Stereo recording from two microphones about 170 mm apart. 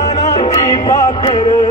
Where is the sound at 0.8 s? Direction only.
30° left (ahead or behind).